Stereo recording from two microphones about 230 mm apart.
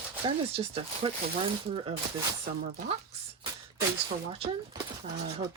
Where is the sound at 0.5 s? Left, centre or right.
Right.